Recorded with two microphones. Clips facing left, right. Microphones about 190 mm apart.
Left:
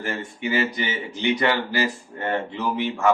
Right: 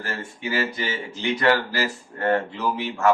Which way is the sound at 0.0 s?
20° left (ahead or behind).